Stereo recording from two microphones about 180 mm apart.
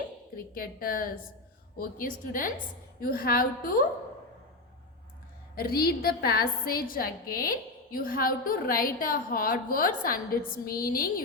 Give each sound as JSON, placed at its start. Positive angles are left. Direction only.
{"t": 0.5, "sound": "a woman's voice", "side_deg": 55}
{"t": 5.5, "sound": "a woman's voice", "side_deg": 55}